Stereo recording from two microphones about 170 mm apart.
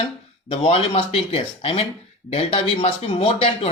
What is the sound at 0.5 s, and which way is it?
Speech, 35° left (ahead or behind).